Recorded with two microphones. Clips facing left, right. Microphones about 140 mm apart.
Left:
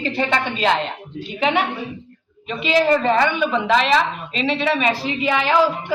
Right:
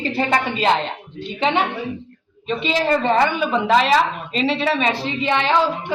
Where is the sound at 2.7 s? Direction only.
35° right (ahead or behind).